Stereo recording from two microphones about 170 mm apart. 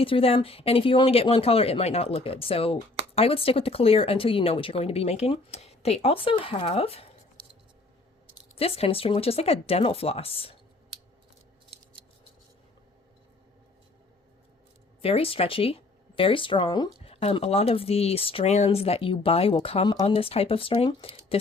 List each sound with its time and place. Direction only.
0.0 s speech: 35° left (ahead or behind)
8.5 s speech: 35° left (ahead or behind)
15.0 s speech: 35° left (ahead or behind)